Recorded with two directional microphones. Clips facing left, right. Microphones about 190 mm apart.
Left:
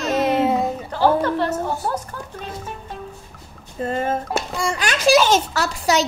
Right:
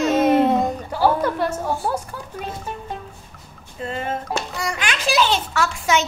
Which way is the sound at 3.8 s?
40° left (ahead or behind).